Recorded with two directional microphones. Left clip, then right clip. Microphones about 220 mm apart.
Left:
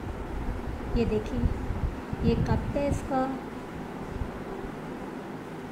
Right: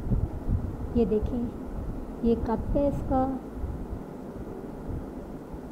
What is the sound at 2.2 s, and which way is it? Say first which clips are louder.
Speech: right 2 dB; 20° right (ahead or behind).